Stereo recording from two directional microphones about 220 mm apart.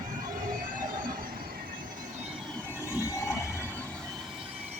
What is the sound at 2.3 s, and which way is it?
Train, 5° left (ahead or behind).